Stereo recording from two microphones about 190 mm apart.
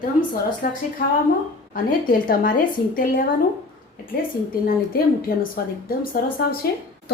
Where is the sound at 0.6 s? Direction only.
50° left (ahead or behind).